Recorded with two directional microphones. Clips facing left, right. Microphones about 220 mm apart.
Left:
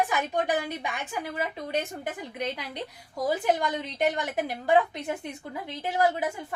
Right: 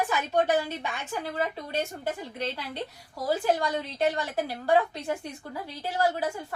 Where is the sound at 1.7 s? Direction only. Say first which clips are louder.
Even; 15° left (ahead or behind).